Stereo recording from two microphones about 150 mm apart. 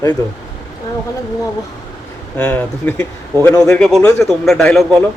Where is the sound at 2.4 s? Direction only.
10° left (ahead or behind).